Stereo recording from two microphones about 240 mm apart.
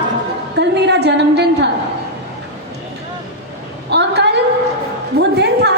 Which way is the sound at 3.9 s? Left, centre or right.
Right.